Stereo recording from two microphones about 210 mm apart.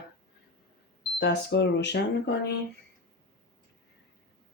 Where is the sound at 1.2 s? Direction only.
55° left (ahead or behind).